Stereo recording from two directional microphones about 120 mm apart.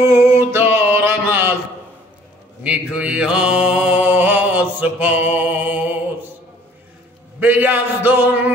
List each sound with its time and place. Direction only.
0.0 s mantra: 25° right (ahead or behind)
2.6 s mantra: 10° right (ahead or behind)
7.3 s a sound: 15° right (ahead or behind)